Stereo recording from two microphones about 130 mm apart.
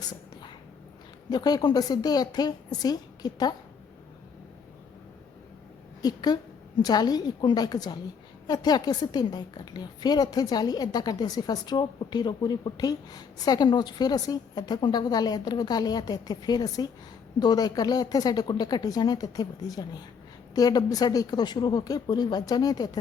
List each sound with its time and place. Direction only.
1.3 s a woman's voice: 30° left (ahead or behind)
6.0 s a woman's voice: 30° left (ahead or behind)